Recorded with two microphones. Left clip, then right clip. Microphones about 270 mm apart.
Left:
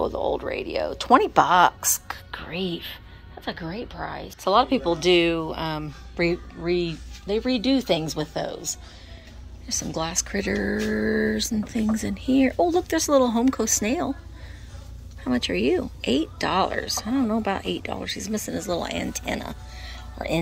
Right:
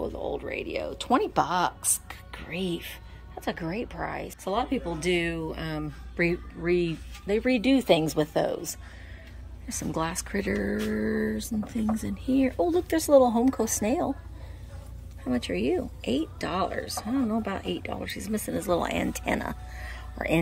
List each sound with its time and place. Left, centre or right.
0.0 s speech: centre
4.5 s speech: centre
15.2 s speech: centre